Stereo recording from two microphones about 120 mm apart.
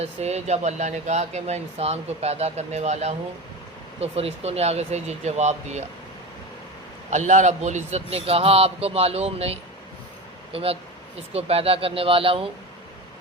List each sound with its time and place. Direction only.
0.0 s speech: 60° right (ahead or behind)
4.0 s speech: 55° right (ahead or behind)
7.1 s speech: 80° right
8.1 s speech: 55° right (ahead or behind)